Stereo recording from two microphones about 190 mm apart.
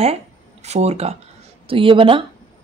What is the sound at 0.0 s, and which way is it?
Speech, 35° right (ahead or behind).